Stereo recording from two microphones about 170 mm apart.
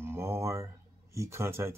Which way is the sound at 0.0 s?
15° right (ahead or behind).